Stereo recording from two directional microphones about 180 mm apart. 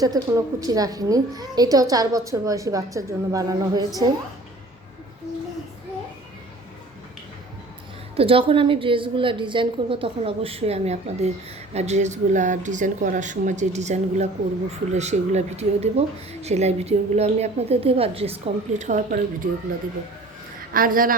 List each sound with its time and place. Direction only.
0.0 s a woman's voice: 20° right (ahead or behind)
8.1 s a woman's voice: 30° right (ahead or behind)
20.7 s speech: 50° right (ahead or behind)